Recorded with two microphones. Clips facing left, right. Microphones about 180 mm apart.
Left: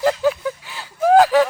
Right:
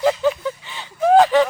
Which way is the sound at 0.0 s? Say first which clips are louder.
Even; centre (ahead or behind).